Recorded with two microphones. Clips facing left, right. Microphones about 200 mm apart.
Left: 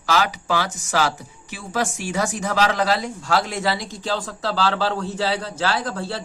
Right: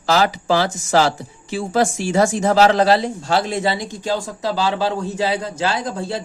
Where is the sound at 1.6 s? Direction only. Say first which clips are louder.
Right 7 dB; 45° right (ahead or behind).